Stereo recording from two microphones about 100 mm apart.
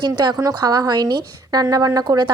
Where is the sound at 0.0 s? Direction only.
50° right (ahead or behind).